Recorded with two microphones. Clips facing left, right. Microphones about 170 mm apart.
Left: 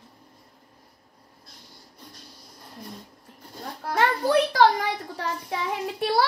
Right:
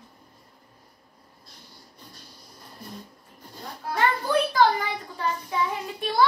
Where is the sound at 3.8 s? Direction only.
80° left.